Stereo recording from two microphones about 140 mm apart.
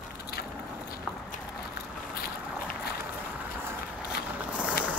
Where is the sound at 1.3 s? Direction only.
90° left.